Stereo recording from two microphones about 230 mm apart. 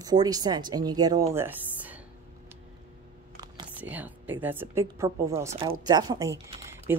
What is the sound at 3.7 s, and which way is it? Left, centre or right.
A woman's voice, centre.